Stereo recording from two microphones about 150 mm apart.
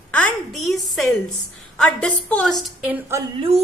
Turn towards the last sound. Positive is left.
turn(degrees=-45)  # may be behind; listen again after turning